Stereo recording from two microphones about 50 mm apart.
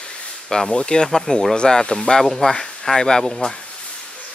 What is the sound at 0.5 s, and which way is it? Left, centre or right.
Speech, centre.